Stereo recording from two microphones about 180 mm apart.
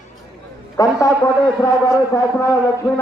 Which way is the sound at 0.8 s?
20° left (ahead or behind).